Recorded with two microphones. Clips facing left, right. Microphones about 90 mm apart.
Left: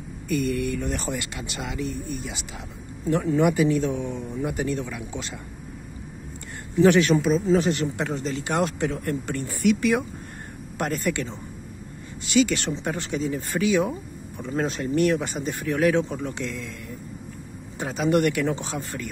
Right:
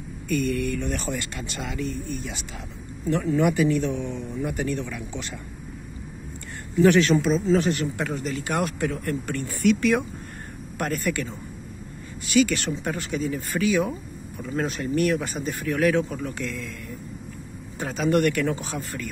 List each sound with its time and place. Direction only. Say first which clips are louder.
0.3 s speech: even; 20° left (ahead or behind)
1.1 s speech: even; 10° left (ahead or behind)
6.8 s speech: even; 20° left (ahead or behind)
7.2 s speech: even; 10° left (ahead or behind)
17.7 s speech: even; 20° left (ahead or behind)